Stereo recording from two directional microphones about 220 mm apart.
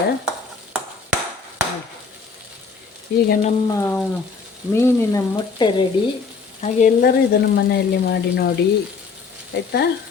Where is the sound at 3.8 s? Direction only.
10° left (ahead or behind).